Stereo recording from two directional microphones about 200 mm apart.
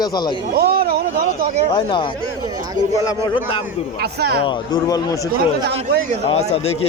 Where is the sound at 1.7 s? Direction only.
25° left (ahead or behind).